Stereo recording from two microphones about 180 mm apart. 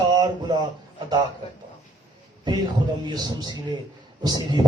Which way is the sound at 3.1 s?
25° right (ahead or behind).